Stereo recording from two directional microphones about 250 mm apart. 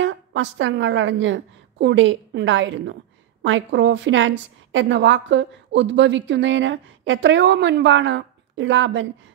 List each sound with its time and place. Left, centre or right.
0.0 s a woman's voice: right